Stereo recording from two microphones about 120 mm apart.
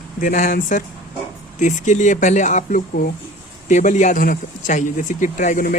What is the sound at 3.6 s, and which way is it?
Speech, 90° left.